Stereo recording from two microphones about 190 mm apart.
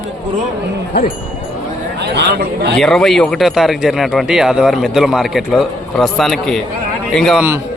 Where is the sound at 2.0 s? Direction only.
60° right (ahead or behind).